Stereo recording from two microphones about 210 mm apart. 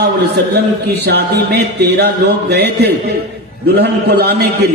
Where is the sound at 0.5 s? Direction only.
50° right (ahead or behind).